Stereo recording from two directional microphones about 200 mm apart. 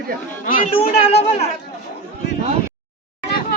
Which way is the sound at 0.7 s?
30° left (ahead or behind).